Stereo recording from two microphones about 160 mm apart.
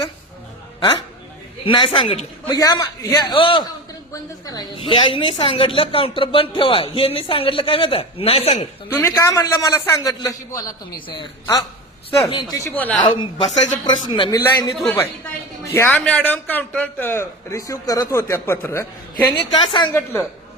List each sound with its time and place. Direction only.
0.8 s a man's voice: 30° left (ahead or behind)
2.6 s a man's voice: 25° left (ahead or behind); by 8.6 s 40° left (ahead or behind)
9.0 s a man's voice: 15° left (ahead or behind)
13.1 s a woman's voice: 30° left (ahead or behind); by 19.3 s 15° left (ahead or behind)
19.4 s a man's voice: 30° left (ahead or behind)